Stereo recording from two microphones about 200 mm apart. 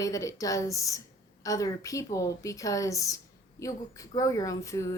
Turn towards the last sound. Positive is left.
turn(degrees=15)  # may be behind; listen again after turning